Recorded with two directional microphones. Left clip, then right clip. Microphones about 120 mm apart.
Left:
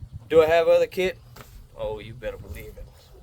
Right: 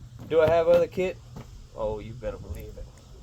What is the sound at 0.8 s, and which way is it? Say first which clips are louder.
Speech: left 3 dB; 65° left (ahead or behind).